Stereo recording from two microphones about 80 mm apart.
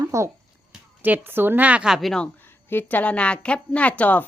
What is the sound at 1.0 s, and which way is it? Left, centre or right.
Speech, right.